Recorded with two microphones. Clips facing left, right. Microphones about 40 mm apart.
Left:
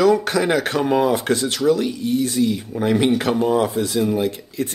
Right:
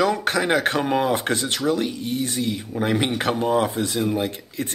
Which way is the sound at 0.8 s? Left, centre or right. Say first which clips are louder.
Left 3 dB; right.